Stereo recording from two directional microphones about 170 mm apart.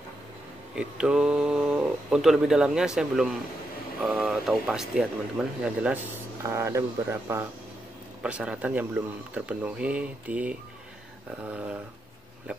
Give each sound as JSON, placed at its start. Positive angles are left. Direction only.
{"t": 0.7, "sound": "speech", "side_deg": -5}
{"t": 6.4, "sound": "speech", "side_deg": -15}